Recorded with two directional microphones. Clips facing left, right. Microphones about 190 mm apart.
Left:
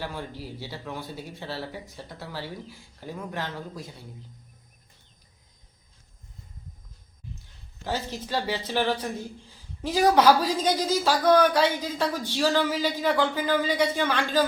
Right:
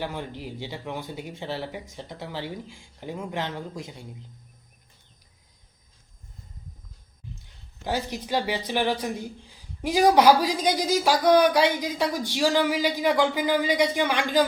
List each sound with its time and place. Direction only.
0.0 s speech: 20° right (ahead or behind)
7.9 s a woman's voice: 15° right (ahead or behind)